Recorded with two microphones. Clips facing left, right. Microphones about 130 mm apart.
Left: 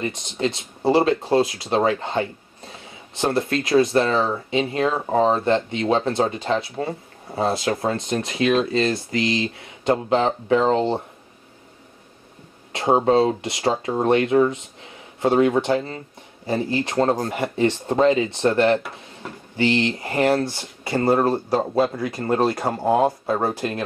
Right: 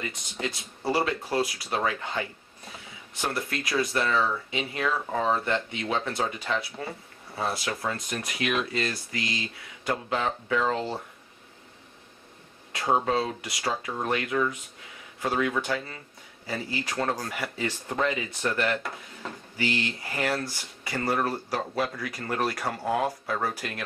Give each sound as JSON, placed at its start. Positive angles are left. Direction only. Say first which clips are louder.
{"t": 0.0, "sound": "speech", "louder": "left 9 dB", "side_deg": 25}
{"t": 12.7, "sound": "speech", "louder": "left 8 dB", "side_deg": 30}